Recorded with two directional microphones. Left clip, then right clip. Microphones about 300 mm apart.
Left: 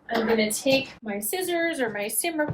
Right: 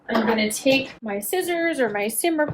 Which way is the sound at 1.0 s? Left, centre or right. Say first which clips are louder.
Right 4 dB; right.